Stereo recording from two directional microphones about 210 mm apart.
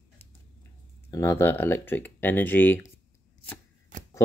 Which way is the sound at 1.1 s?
15° left (ahead or behind).